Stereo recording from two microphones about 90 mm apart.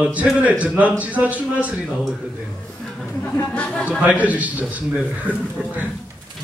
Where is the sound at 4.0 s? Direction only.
15° right (ahead or behind).